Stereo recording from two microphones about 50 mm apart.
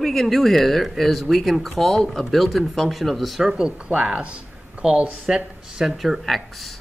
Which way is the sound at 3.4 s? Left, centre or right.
Centre.